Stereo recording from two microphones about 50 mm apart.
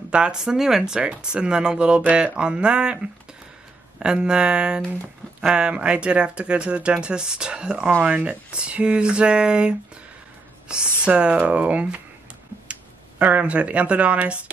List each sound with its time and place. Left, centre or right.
0.1 s speech: centre
13.2 s speech: right